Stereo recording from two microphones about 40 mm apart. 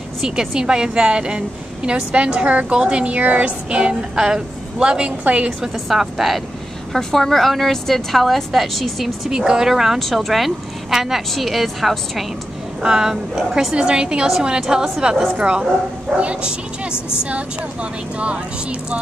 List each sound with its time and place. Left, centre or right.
0.2 s a woman's voice: centre
3.2 s speech: right
3.7 s a woman's voice: right
5.6 s a woman's voice: centre
6.9 s a woman's voice: centre
9.9 s a woman's voice: centre
12.8 s a woman's voice: centre
13.7 s a woman's voice: right
15.3 s a woman's voice: right
18.2 s speech: right